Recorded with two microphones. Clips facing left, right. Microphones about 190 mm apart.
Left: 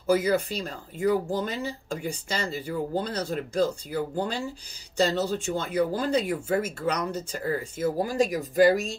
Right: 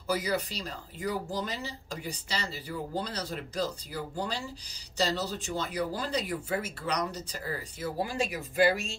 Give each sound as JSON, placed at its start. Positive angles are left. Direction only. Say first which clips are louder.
{"t": 0.0, "sound": "speech", "louder": "left 7 dB", "side_deg": 50}